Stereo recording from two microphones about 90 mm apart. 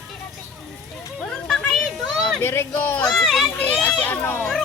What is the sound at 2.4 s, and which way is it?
Speech, 25° left (ahead or behind).